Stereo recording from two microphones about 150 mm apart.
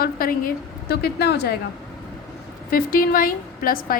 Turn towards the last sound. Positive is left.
turn(degrees=75)  # may be behind; listen again after turning